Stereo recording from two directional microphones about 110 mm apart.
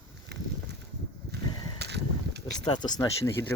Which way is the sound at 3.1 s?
25° left (ahead or behind).